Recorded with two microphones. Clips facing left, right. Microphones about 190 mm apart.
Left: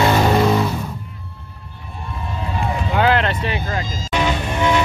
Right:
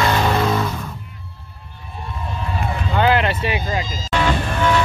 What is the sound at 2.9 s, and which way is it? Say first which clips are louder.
Vehicle: even; centre (ahead or behind).